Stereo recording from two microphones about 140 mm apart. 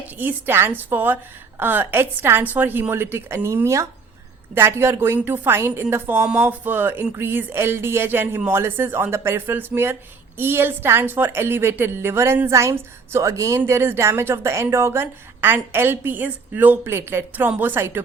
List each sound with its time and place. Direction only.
0.2 s a woman's voice: 15° right (ahead or behind)